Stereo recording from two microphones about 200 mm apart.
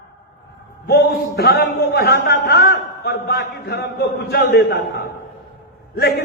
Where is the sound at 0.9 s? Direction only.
55° left (ahead or behind).